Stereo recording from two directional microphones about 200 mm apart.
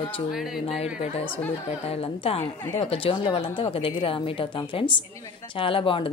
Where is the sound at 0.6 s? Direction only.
30° left (ahead or behind).